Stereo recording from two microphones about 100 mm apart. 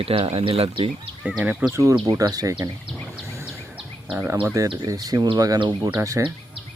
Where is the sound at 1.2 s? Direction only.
10° right (ahead or behind).